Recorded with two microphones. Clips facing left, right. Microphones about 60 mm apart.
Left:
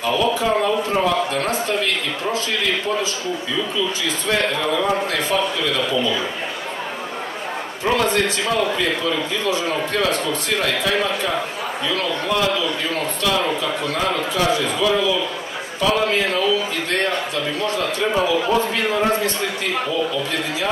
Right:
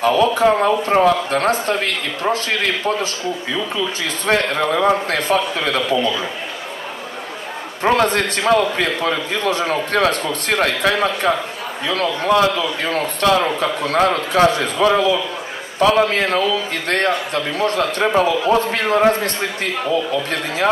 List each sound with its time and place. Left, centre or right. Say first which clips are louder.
0.0 s a man's voice: right 5 dB; right
4.3 s a man's voice: right 4 dB; right
7.8 s a man's voice: right 3 dB; right